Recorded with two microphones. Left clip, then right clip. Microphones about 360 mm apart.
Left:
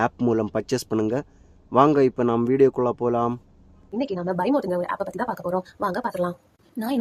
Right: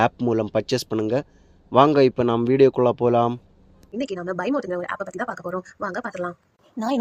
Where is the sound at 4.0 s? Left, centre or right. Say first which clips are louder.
Left 1 dB; left.